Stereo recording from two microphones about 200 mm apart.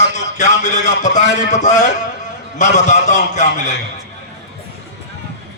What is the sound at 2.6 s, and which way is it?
A man's voice, 35° left (ahead or behind).